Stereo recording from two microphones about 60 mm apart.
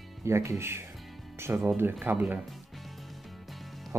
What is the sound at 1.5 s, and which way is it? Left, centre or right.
Speech, right.